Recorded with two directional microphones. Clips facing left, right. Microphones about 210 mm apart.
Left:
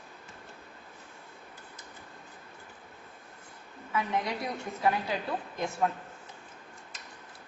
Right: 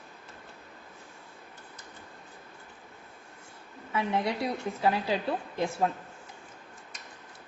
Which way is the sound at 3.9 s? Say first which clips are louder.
Right 2 dB; 25° right (ahead or behind).